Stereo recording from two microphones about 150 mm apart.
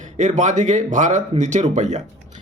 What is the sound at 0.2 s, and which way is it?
Speech, 55° right (ahead or behind).